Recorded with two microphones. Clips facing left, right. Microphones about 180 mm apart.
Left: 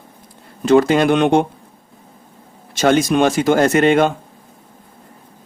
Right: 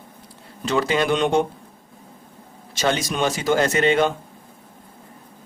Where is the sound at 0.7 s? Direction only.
50° left (ahead or behind).